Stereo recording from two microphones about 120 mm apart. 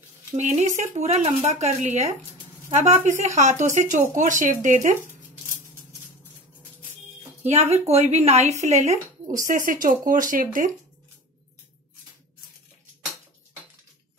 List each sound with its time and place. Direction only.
0.4 s speech: 75° right (ahead or behind)
7.4 s speech: 70° right (ahead or behind); by 10.7 s 90° right